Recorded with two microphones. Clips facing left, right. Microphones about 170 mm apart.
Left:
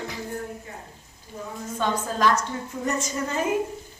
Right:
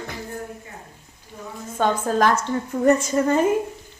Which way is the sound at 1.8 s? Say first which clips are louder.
Right 5 dB; 55° right (ahead or behind).